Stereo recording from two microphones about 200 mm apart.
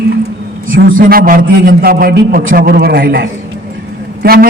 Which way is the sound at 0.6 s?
45° right (ahead or behind).